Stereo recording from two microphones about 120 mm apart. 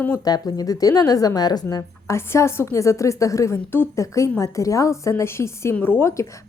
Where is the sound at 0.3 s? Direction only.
30° left (ahead or behind).